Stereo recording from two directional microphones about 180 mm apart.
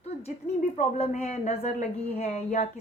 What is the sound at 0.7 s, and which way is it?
A woman's voice, 35° left (ahead or behind).